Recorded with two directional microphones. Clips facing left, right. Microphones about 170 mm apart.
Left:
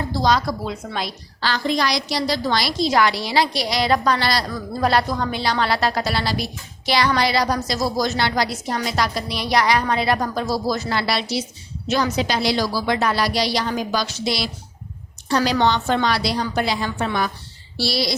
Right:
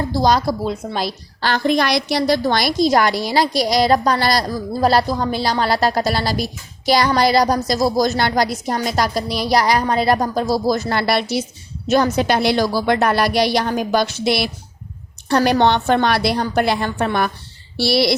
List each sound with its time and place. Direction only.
0.3 s a woman's voice: 35° right (ahead or behind)
1.4 s a woman's voice: 55° right (ahead or behind)